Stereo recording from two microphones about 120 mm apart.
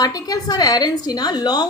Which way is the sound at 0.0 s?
35° left (ahead or behind).